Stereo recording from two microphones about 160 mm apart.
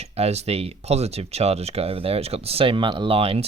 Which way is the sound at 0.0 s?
40° right (ahead or behind).